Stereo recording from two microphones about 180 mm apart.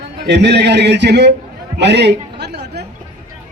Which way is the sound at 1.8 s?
70° right (ahead or behind).